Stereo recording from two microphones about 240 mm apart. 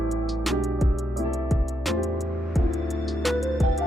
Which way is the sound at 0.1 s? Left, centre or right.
Centre.